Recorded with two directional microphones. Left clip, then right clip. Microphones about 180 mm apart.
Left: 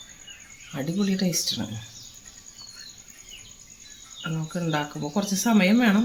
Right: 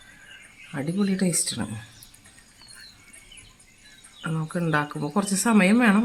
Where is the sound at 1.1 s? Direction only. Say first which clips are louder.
Left 1 dB; 25° right (ahead or behind).